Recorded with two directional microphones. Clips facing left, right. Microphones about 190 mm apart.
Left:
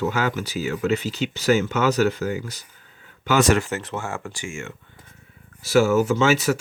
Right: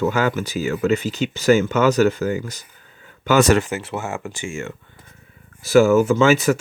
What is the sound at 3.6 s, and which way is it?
Speech, 10° right (ahead or behind).